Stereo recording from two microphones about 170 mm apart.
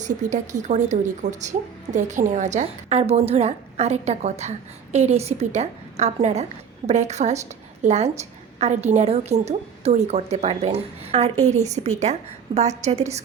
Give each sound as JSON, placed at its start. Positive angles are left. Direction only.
{"t": 0.0, "sound": "a woman's voice", "side_deg": -45}